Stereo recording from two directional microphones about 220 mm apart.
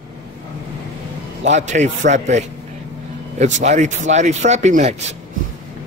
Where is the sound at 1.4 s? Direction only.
30° right (ahead or behind).